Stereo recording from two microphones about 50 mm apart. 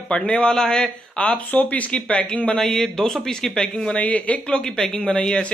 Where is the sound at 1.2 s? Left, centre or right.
Left; by 3.9 s centre.